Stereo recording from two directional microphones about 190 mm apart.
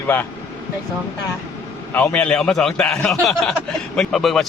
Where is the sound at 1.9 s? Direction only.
10° left (ahead or behind).